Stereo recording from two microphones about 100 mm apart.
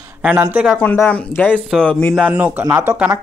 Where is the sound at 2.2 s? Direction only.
15° right (ahead or behind).